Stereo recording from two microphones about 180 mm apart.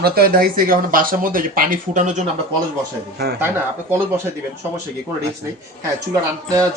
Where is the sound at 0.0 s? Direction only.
60° right (ahead or behind).